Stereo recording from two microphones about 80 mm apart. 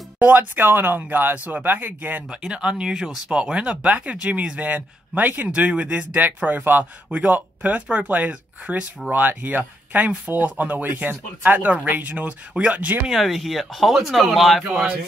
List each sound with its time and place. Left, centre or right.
0.2 s speech: right
2.2 s speech: centre
13.0 s speech: centre
14.6 s speech: centre